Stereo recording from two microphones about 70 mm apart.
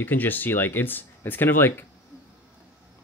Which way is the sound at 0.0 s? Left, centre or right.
Left.